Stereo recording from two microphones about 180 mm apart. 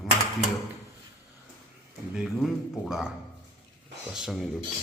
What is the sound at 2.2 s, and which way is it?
Speech, centre (ahead or behind).